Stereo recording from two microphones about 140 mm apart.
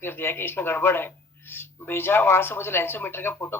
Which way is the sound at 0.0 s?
15° left (ahead or behind).